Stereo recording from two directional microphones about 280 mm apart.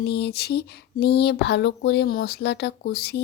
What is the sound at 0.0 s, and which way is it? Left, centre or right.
Speech, left.